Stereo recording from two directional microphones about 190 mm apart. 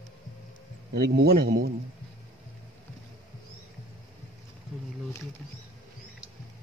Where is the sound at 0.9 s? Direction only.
55° right (ahead or behind).